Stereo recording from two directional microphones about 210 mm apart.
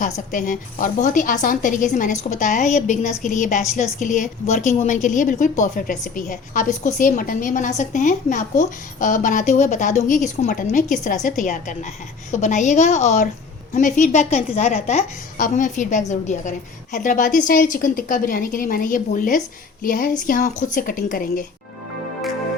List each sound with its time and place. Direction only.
0.0 s a woman's voice: 40° left (ahead or behind)